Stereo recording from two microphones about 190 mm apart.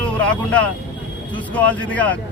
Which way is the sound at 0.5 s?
5° left (ahead or behind).